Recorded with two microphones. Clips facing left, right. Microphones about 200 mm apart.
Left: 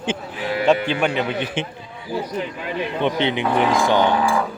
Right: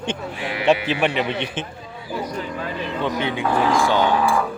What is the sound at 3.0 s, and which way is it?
Speech, 25° left (ahead or behind).